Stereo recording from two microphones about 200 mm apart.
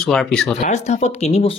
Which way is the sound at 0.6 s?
35° left (ahead or behind).